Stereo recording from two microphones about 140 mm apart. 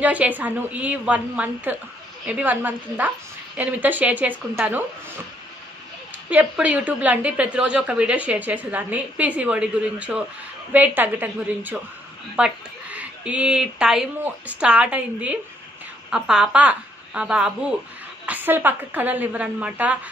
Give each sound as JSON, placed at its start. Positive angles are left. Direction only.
{"t": 0.0, "sound": "a woman's voice", "side_deg": -10}
{"t": 6.3, "sound": "a woman's voice", "side_deg": -10}